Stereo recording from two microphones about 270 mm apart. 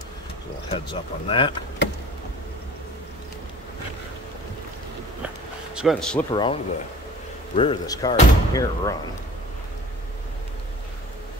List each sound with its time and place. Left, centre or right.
0.7 s speech: centre
5.8 s speech: centre
6.3 s speech: centre